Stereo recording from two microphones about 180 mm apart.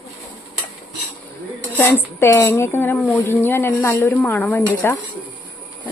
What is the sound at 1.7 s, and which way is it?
A woman's voice, 10° left (ahead or behind).